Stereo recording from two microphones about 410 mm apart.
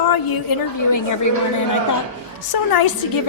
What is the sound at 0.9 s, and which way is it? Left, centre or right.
Speech, left.